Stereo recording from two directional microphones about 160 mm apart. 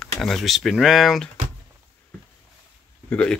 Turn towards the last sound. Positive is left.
turn(degrees=5)  # may be behind; listen again after turning